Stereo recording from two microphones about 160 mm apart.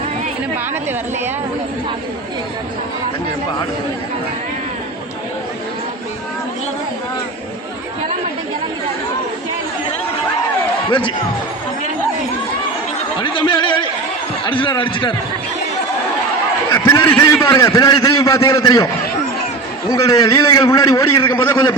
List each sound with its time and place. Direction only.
10.8 s speech: 30° left (ahead or behind)
13.2 s a man's voice: 30° left (ahead or behind)
16.6 s a man's voice: 15° left (ahead or behind)
17.5 s a man's voice: 25° left (ahead or behind)
19.9 s a man's voice: 20° left (ahead or behind)